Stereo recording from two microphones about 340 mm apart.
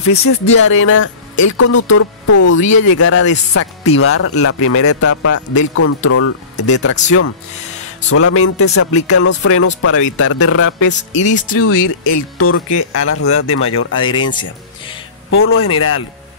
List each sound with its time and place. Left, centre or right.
0.1 s a man's voice: left
8.1 s a man's voice: left
11.2 s speech: left
11.5 s a man's voice: left
13.9 s speech: centre
15.2 s a man's voice: left